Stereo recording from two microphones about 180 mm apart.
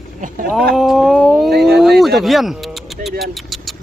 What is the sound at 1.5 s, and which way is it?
Speech, 65° right (ahead or behind).